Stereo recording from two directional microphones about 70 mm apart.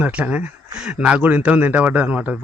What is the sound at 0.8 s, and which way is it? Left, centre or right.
Speech, centre.